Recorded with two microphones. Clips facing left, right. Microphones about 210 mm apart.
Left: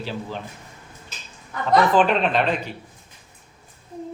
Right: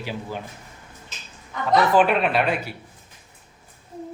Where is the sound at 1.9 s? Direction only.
10° right (ahead or behind).